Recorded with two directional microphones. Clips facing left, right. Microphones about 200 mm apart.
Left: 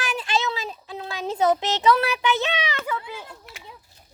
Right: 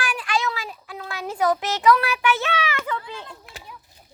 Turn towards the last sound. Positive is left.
turn(degrees=10)  # may be behind; listen again after turning